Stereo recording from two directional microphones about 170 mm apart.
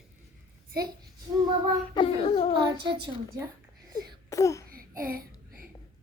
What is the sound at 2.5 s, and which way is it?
Speech, 25° right (ahead or behind).